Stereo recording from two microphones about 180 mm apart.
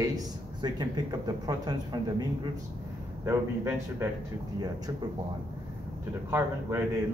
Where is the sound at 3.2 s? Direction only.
15° right (ahead or behind).